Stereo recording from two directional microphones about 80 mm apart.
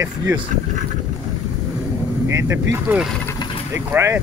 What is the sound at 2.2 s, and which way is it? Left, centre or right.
Speech, right.